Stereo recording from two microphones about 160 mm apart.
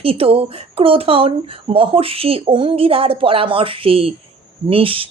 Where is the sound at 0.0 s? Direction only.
35° right (ahead or behind).